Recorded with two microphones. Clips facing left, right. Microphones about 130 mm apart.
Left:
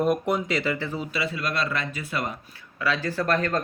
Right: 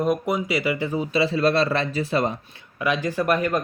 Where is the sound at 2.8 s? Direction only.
15° right (ahead or behind).